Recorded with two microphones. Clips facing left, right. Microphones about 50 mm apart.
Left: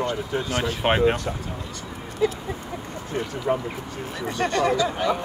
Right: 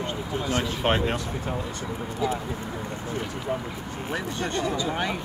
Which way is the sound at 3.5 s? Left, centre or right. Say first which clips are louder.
Left 5 dB; left.